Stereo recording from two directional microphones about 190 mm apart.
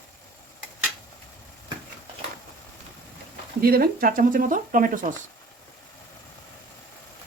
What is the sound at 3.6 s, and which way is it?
Speech, 50° right (ahead or behind).